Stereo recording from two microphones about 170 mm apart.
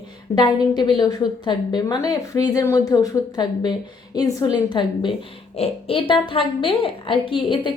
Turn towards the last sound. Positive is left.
turn(degrees=30)  # may be behind; listen again after turning